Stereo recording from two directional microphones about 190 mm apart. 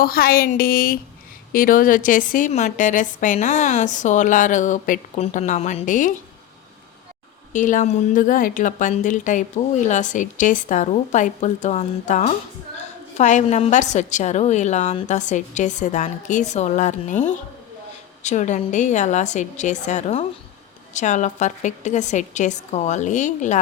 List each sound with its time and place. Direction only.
0.0 s a woman's voice: 50° left (ahead or behind)
7.5 s a woman's voice: 40° left (ahead or behind)